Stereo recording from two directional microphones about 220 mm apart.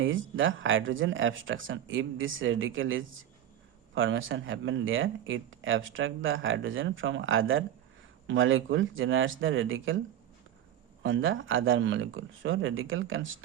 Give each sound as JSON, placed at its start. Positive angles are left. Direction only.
{"t": 0.0, "sound": "speech", "side_deg": -60}
{"t": 11.0, "sound": "speech", "side_deg": -60}